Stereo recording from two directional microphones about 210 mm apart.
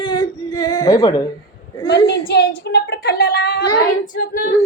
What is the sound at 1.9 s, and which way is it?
A woman's voice, 55° left (ahead or behind).